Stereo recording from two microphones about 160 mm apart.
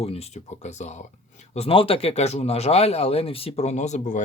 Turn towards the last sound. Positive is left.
turn(degrees=50)  # may be behind; listen again after turning